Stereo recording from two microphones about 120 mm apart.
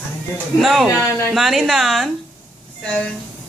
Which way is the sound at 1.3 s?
Centre (ahead or behind).